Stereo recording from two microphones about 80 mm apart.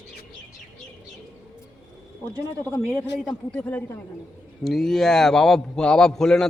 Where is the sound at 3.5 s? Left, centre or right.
Left.